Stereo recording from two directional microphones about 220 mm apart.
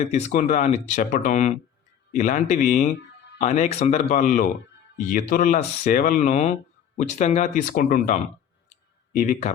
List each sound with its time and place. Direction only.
0.0 s speech: 30° left (ahead or behind)